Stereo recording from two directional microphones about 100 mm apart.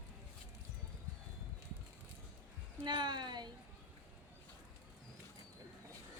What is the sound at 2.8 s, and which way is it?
Speech, 45° right (ahead or behind).